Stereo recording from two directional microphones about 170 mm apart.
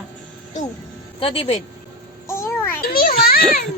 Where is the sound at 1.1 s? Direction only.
35° left (ahead or behind).